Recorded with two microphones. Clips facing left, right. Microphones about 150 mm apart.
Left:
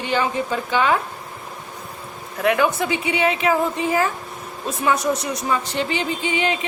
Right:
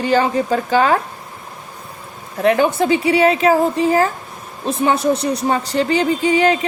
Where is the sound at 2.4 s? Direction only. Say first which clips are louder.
Right 4 dB; 30° right (ahead or behind).